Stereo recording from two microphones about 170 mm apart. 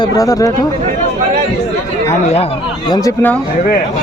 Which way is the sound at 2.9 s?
20° left (ahead or behind).